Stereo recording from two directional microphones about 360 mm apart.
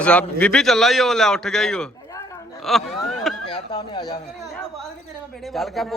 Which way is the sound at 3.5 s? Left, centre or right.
Centre.